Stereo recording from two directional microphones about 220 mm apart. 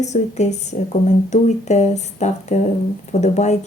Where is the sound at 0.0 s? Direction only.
30° left (ahead or behind).